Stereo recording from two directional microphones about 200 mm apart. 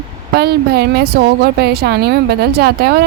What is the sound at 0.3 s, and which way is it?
Speech, 50° right (ahead or behind).